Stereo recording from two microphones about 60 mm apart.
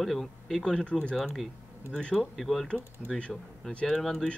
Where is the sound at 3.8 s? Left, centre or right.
Centre.